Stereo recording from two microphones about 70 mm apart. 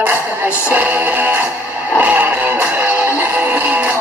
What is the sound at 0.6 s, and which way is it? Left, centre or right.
Music, right.